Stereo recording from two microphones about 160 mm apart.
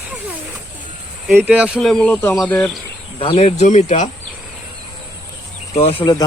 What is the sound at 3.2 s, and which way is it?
Speech, 35° left (ahead or behind).